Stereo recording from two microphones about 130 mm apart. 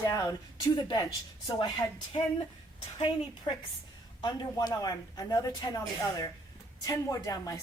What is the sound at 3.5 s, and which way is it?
A woman's voice, 35° left (ahead or behind).